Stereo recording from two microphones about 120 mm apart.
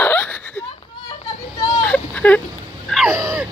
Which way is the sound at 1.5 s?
30° left (ahead or behind).